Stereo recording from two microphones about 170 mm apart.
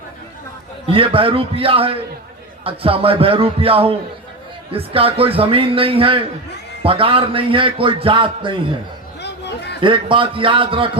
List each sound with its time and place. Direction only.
0.9 s a man's voice: 35° right (ahead or behind)
9.2 s a sound: 85° left
9.8 s a man's voice: 30° right (ahead or behind)